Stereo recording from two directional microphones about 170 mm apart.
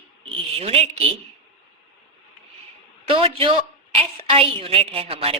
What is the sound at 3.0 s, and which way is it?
A woman's voice, 35° right (ahead or behind).